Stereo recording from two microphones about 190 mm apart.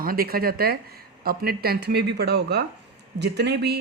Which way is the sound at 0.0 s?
50° right (ahead or behind).